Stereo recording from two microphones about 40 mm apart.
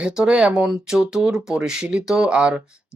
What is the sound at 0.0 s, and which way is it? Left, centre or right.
Speech, right.